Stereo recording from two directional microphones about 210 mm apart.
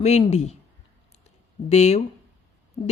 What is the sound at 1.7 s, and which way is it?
Speech, 30° left (ahead or behind).